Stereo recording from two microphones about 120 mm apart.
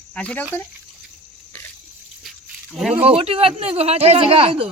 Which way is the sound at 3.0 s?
55° right (ahead or behind).